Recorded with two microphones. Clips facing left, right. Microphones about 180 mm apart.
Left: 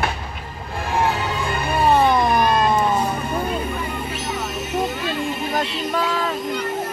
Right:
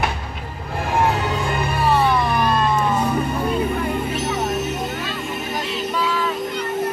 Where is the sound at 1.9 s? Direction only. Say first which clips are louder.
Left 2 dB; 40° left (ahead or behind).